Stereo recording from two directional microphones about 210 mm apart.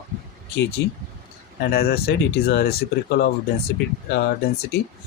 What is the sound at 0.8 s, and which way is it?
Speech, 55° left (ahead or behind).